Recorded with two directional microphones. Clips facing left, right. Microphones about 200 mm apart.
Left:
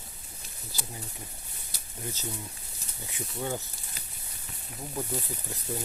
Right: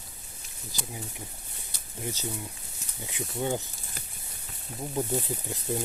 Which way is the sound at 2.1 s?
20° right (ahead or behind).